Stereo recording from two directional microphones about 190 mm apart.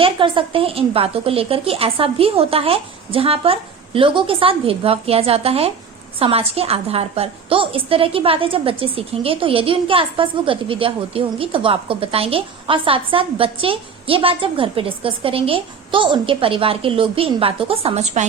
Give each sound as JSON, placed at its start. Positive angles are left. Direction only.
{"t": 0.0, "sound": "a woman's voice", "side_deg": -25}